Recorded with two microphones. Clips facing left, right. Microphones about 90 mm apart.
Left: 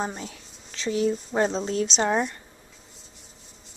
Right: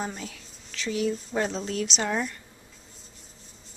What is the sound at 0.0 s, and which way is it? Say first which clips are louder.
A woman's voice: left 3 dB; 30° left (ahead or behind).